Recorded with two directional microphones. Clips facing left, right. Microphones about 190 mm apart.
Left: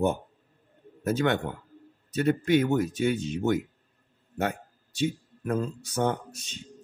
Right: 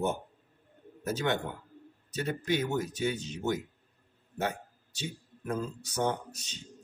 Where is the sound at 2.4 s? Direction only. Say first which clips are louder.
Left 4 dB; 60° left (ahead or behind).